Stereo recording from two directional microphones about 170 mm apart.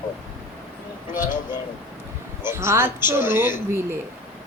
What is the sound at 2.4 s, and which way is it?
Speech, 15° right (ahead or behind).